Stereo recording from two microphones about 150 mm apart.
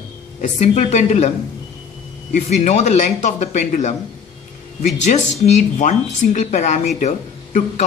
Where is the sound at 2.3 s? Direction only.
50° left (ahead or behind).